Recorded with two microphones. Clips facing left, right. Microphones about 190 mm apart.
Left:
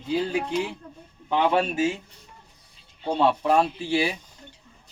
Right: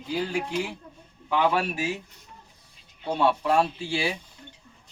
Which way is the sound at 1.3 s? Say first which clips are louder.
Left 2 dB; 25° left (ahead or behind).